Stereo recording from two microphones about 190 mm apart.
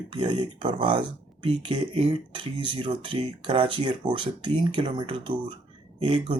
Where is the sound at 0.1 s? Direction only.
25° right (ahead or behind).